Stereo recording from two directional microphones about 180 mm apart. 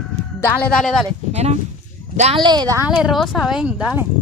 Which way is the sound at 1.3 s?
35° right (ahead or behind).